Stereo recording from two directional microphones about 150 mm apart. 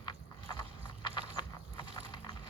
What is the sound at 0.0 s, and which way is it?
Clip-clop, 30° left (ahead or behind).